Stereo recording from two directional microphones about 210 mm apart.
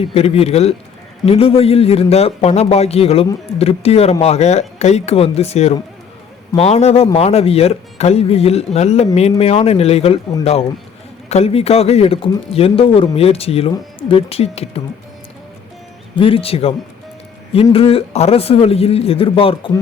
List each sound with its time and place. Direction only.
0.0 s speech: 30° left (ahead or behind)
16.1 s speech: 25° left (ahead or behind)